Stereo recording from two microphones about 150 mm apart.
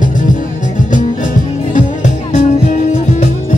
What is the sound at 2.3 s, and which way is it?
Music, 55° left (ahead or behind).